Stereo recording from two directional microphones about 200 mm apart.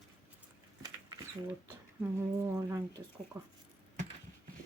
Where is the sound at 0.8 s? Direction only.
20° right (ahead or behind).